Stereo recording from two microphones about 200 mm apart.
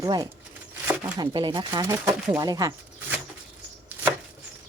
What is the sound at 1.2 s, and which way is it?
Speech, 25° right (ahead or behind).